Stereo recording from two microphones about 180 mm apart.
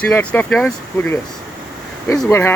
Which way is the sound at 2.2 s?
15° left (ahead or behind).